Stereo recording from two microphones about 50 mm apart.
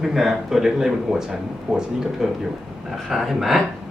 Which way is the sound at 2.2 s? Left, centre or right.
Centre.